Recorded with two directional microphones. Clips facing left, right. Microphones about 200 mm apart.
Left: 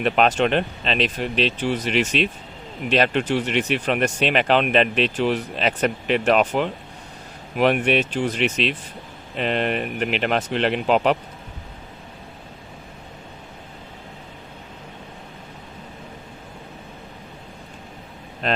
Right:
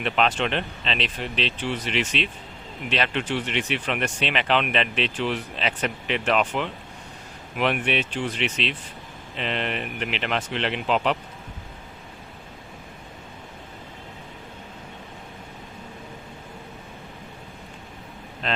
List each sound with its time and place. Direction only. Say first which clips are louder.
0.0 s speech: left 5 dB; 45° left (ahead or behind)